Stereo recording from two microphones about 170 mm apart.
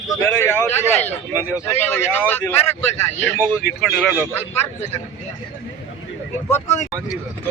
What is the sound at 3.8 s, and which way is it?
Speech, centre (ahead or behind).